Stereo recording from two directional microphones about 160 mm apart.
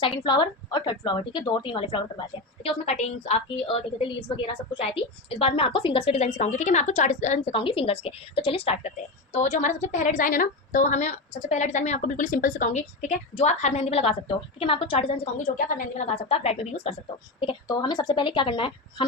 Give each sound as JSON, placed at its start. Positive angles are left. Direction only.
{"t": 0.3, "sound": "a woman's voice", "side_deg": 30}
{"t": 2.6, "sound": "a woman's voice", "side_deg": 45}
{"t": 5.4, "sound": "a woman's voice", "side_deg": 35}
{"t": 7.5, "sound": "a woman's voice", "side_deg": 35}
{"t": 15.5, "sound": "a woman's voice", "side_deg": 60}
{"t": 17.4, "sound": "a woman's voice", "side_deg": 30}